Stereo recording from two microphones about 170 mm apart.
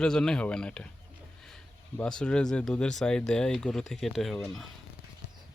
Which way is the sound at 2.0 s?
5° left (ahead or behind).